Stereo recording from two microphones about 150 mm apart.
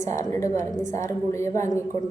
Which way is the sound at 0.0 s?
20° left (ahead or behind).